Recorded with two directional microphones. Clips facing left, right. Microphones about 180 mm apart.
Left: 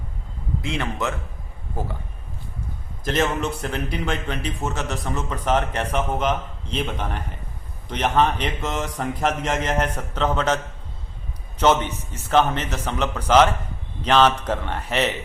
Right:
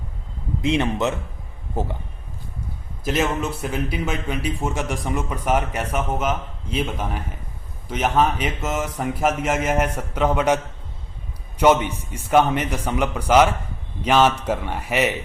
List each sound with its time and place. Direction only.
0.6 s a man's voice: 20° right (ahead or behind)
3.0 s a man's voice: 10° right (ahead or behind)